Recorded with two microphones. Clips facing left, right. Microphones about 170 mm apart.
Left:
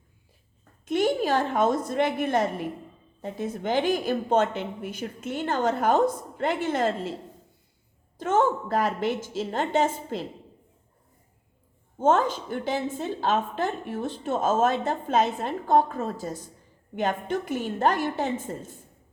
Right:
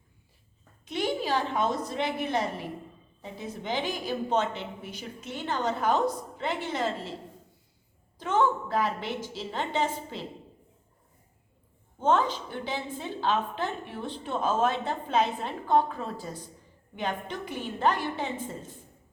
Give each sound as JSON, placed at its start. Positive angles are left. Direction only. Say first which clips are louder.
{"t": 0.9, "sound": "a woman's voice", "louder": "left 5 dB", "side_deg": 50}
{"t": 8.2, "sound": "a woman's voice", "louder": "left 3 dB", "side_deg": 45}
{"t": 11.9, "sound": "a woman's voice", "louder": "left 3 dB", "side_deg": 45}